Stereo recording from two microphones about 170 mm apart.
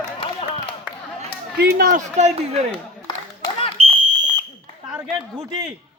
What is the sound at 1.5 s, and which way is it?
Speech, 65° right (ahead or behind).